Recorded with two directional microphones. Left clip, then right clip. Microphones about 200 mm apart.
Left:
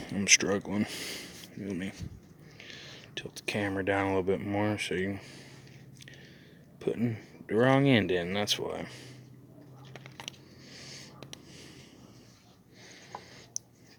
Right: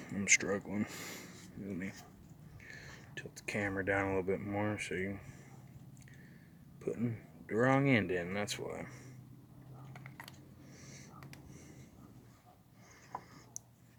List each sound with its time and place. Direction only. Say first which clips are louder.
0.0 s speech: left 6 dB; 30° left (ahead or behind)
2.6 s whispering: left 5 dB; 25° left (ahead or behind)
3.4 s speech: left 5 dB; 30° left (ahead or behind)
6.9 s speech: left 6 dB; 30° left (ahead or behind)
10.7 s a sound: left 10 dB; 30° left (ahead or behind)